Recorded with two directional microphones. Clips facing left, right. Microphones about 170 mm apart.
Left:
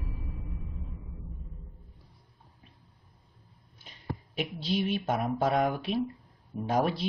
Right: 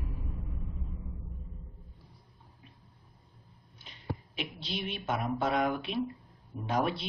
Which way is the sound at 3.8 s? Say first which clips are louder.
Even; 40° left (ahead or behind).